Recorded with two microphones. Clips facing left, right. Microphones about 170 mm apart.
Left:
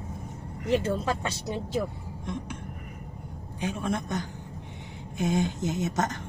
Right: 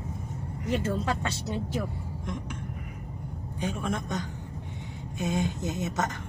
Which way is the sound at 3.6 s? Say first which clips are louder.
Left 1 dB; 10° left (ahead or behind).